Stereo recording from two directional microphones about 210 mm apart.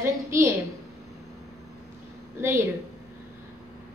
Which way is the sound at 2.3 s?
10° right (ahead or behind).